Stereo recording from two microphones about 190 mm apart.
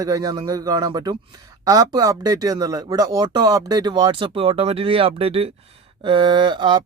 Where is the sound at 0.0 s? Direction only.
20° right (ahead or behind).